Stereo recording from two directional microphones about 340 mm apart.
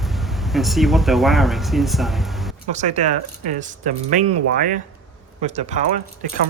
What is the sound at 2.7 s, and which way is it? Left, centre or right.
Speech, right.